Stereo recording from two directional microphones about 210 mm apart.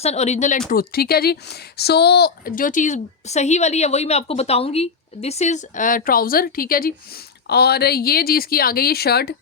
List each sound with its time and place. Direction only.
0.0 s speech: 30° left (ahead or behind)
0.7 s speech: 45° left (ahead or behind)